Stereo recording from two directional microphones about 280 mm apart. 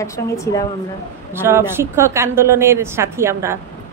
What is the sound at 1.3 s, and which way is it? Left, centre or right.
A woman's voice, centre.